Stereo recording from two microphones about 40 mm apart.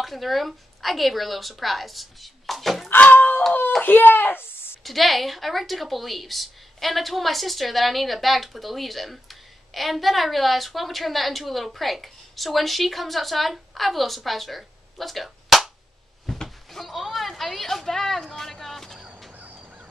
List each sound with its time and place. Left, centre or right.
0.0 s a woman's voice: centre
3.1 s a sound: left
3.8 s speech: left
4.8 s a woman's voice: centre
16.3 s a sound: centre
18.3 s vehicle: centre
19.3 s fowl: right